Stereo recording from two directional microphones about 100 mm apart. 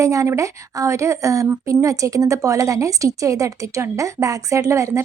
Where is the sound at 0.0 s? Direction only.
30° right (ahead or behind).